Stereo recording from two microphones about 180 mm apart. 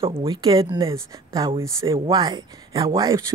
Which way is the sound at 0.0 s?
30° right (ahead or behind).